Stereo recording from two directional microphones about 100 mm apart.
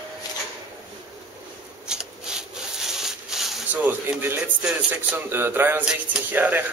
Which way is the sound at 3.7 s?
20° right (ahead or behind).